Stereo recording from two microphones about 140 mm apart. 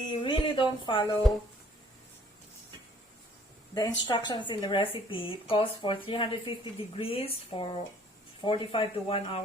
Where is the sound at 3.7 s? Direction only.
30° left (ahead or behind).